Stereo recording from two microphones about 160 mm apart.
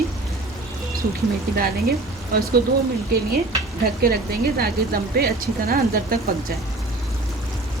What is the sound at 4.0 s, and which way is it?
Speech, 70° right (ahead or behind).